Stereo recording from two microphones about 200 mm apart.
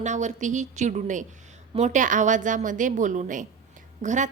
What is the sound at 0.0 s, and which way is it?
A woman's voice, 35° right (ahead or behind).